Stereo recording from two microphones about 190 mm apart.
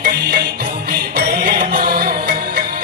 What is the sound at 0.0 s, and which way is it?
Music, 60° right (ahead or behind).